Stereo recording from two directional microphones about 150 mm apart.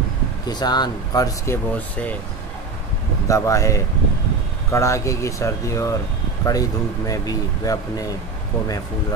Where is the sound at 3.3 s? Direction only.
20° left (ahead or behind).